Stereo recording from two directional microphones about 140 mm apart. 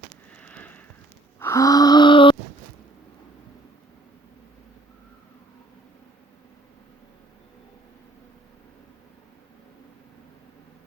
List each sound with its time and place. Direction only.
0.3 s sniff: 10° left (ahead or behind)
1.4 s gasp: 20° left (ahead or behind)